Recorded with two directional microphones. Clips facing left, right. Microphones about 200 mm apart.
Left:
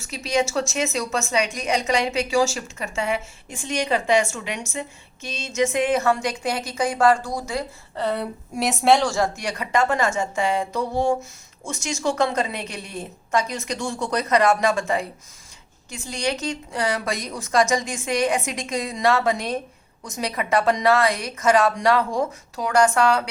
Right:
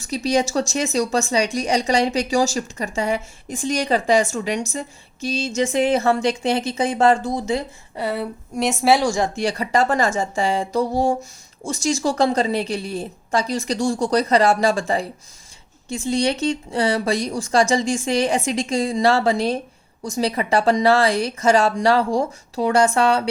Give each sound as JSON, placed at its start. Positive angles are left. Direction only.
{"t": 0.1, "sound": "a woman's voice", "side_deg": -35}
{"t": 7.9, "sound": "a woman's voice", "side_deg": -5}
{"t": 9.3, "sound": "a woman's voice", "side_deg": -30}